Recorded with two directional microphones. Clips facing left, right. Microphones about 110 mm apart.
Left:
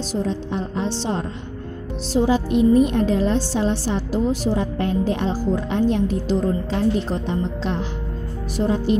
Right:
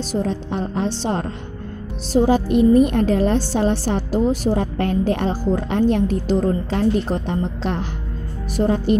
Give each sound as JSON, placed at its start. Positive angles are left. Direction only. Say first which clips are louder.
{"t": 0.1, "sound": "a woman's voice", "louder": "right 1 dB", "side_deg": -55}